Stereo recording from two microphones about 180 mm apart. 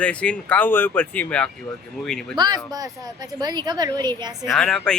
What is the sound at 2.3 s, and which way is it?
Speech, 25° right (ahead or behind).